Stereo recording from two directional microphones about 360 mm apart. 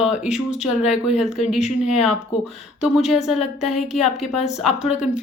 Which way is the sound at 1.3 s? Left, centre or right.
Centre.